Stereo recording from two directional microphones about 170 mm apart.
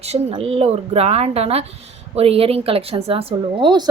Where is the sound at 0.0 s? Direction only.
35° right (ahead or behind).